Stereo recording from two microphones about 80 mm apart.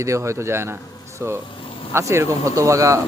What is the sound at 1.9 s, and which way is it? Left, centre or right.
Speech, right.